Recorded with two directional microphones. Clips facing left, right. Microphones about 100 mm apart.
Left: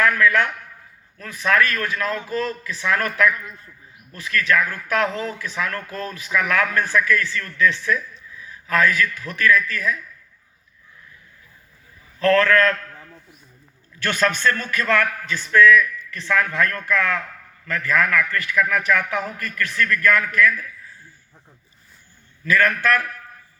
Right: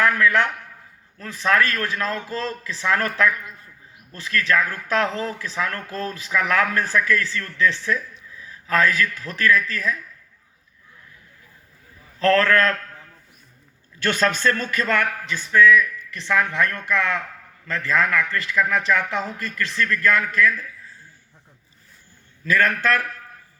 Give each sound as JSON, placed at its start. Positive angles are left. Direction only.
{"t": 0.0, "sound": "a man's voice", "side_deg": -35}
{"t": 12.2, "sound": "speech", "side_deg": -35}
{"t": 14.1, "sound": "a man's voice", "side_deg": -30}
{"t": 22.5, "sound": "a man's voice", "side_deg": -30}